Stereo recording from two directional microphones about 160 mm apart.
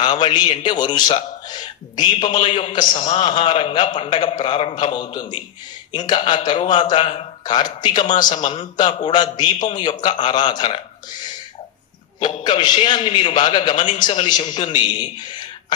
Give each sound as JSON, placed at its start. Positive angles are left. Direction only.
{"t": 0.0, "sound": "a man's voice", "side_deg": 25}